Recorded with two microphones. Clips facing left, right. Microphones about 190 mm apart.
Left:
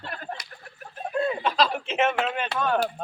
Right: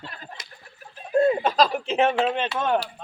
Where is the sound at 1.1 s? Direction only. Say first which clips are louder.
Right 5 dB; 45° right (ahead or behind).